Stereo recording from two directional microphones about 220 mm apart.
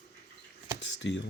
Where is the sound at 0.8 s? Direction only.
55° left (ahead or behind).